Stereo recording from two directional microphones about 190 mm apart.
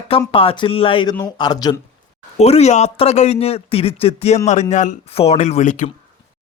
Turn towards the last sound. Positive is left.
turn(degrees=40)  # may be behind; listen again after turning